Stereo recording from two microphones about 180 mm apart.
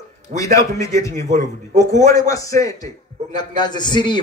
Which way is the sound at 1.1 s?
45° right (ahead or behind).